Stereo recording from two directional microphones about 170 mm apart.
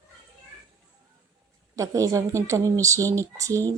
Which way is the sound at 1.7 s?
20° right (ahead or behind).